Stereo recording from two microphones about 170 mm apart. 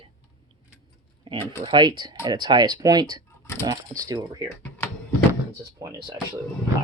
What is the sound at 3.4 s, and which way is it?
Speech, 15° left (ahead or behind).